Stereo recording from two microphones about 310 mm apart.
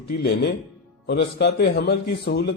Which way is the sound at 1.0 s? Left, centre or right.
Left.